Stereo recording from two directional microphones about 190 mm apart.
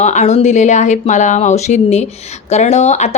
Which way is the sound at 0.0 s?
40° left (ahead or behind).